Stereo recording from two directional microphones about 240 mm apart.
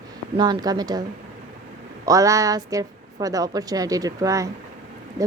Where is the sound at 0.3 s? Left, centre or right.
Centre.